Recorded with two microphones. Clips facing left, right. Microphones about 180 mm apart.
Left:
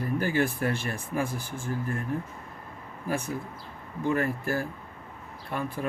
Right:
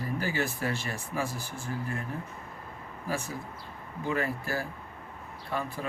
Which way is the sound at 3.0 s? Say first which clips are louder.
Left 4 dB; 50° left (ahead or behind).